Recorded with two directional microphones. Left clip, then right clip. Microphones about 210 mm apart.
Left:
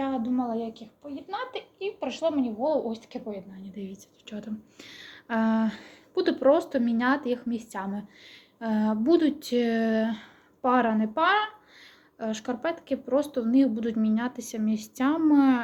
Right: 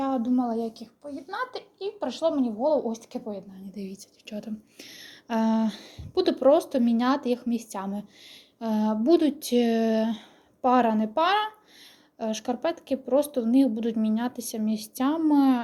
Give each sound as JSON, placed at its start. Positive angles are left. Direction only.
{"t": 0.0, "sound": "a sound", "side_deg": -35}
{"t": 1.3, "sound": "speech", "side_deg": -10}
{"t": 2.2, "sound": "a woman's voice", "side_deg": -35}
{"t": 3.8, "sound": "speech", "side_deg": -20}